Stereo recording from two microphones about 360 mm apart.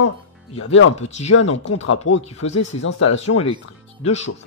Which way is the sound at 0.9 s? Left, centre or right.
Centre.